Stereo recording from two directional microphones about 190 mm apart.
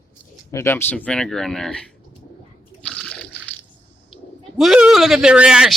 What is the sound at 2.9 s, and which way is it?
Liquid, 5° left (ahead or behind).